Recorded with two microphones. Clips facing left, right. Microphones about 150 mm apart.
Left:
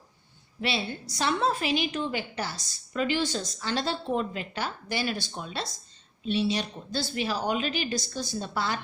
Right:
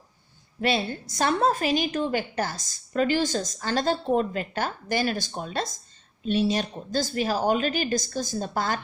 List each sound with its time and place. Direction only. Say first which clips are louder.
0.6 s a woman's voice: right 5 dB; 45° right (ahead or behind)